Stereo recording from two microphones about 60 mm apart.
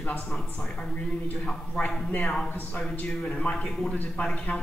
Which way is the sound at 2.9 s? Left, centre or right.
Left.